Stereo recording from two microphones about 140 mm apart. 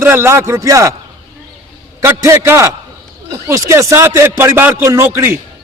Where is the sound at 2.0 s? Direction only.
20° right (ahead or behind).